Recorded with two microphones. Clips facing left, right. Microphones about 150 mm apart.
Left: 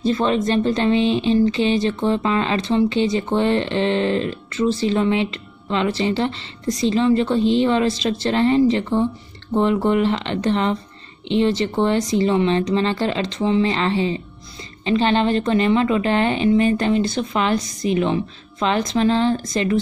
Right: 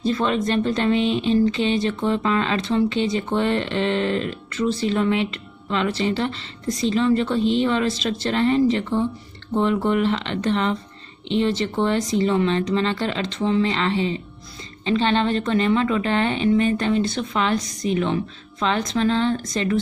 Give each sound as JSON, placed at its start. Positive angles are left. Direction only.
{"t": 0.1, "sound": "speech", "side_deg": 35}